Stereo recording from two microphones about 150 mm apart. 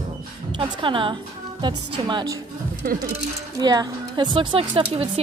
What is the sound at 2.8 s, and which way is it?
Speech, 80° right.